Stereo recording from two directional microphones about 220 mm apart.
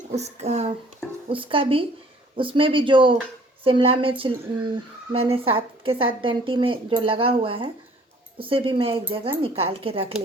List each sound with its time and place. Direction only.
0.2 s a woman's voice: 30° right (ahead or behind)